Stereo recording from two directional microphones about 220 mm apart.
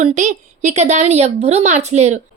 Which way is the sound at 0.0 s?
35° right (ahead or behind).